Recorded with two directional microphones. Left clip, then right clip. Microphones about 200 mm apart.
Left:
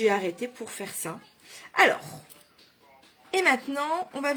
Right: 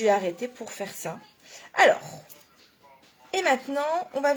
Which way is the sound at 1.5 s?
35° left (ahead or behind).